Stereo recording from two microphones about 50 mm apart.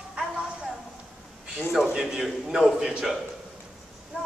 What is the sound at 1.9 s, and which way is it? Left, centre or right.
A man's voice, centre.